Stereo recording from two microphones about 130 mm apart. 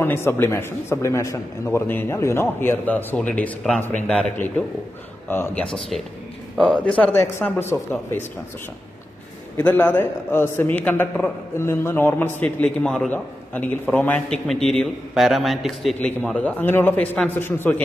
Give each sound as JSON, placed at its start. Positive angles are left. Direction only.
{"t": 0.0, "sound": "a man's voice", "side_deg": 15}
{"t": 9.6, "sound": "a man's voice", "side_deg": 15}